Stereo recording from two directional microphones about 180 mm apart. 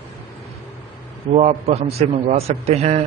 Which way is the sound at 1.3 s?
35° right (ahead or behind).